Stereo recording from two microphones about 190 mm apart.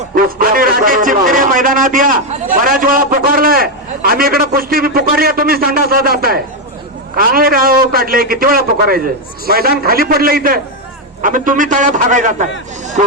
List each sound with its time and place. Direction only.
0.1 s a man's voice: 50° right (ahead or behind)